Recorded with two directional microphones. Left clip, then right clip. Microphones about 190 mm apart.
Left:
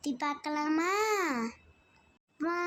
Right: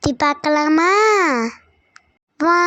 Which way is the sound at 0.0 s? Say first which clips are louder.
Right 16 dB; 50° right (ahead or behind).